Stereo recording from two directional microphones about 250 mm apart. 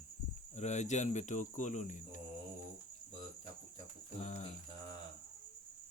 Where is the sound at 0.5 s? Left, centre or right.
Left.